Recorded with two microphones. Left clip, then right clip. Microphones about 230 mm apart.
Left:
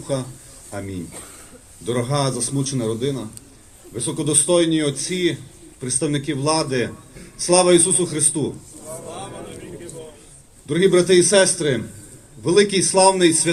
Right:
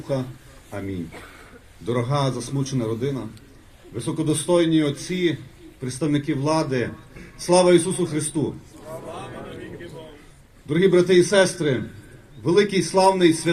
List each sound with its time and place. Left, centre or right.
0.1 s a man's voice: right
10.7 s a man's voice: right